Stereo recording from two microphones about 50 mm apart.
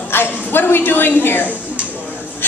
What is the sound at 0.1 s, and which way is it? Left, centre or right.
A woman's voice, left.